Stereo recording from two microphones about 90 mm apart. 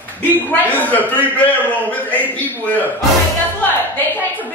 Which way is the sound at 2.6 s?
20° left (ahead or behind).